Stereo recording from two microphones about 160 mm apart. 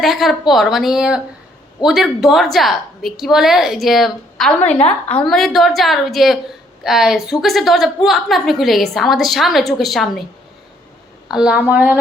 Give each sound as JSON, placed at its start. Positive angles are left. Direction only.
{"t": 0.0, "sound": "a woman's voice", "side_deg": 0}
{"t": 4.8, "sound": "a woman's voice", "side_deg": 40}
{"t": 5.3, "sound": "a woman's voice", "side_deg": 0}
{"t": 11.3, "sound": "a woman's voice", "side_deg": -5}